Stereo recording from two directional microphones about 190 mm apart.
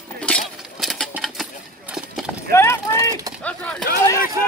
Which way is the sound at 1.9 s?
5° right (ahead or behind).